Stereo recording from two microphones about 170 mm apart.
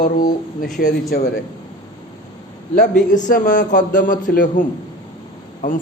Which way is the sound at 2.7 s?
50° left (ahead or behind).